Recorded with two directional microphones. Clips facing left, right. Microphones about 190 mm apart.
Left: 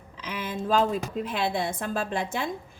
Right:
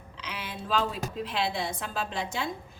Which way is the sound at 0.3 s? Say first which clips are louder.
Left 6 dB; 45° left (ahead or behind).